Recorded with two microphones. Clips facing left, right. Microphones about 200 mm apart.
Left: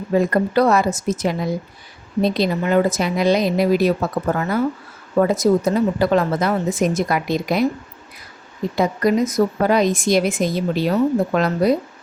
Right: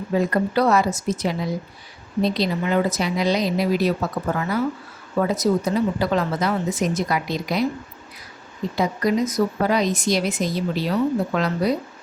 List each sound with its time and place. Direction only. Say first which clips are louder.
0.1 s speech: left 4 dB; 50° left (ahead or behind)
8.7 s speech: left 3 dB; 50° left (ahead or behind)